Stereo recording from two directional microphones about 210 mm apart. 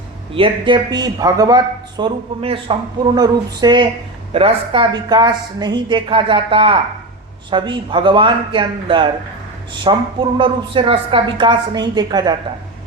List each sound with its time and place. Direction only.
0.3 s a woman's voice: 25° right (ahead or behind)